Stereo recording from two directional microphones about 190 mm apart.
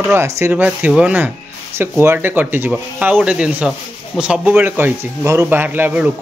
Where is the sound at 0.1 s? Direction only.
15° right (ahead or behind).